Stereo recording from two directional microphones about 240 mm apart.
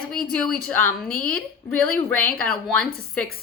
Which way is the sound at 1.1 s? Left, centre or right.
Left.